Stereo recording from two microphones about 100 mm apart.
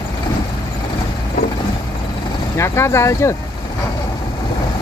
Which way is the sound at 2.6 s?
25° left (ahead or behind).